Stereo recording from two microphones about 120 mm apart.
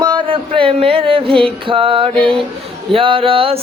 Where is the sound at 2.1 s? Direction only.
10° left (ahead or behind).